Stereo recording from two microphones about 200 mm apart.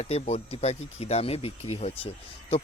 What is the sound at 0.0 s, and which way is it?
Speech, 30° left (ahead or behind).